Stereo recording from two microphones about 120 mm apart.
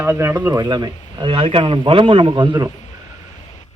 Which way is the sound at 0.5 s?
35° right (ahead or behind).